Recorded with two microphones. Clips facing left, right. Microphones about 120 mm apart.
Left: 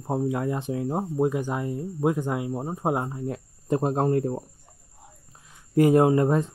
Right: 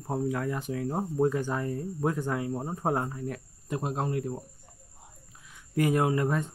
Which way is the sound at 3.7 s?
40° left (ahead or behind).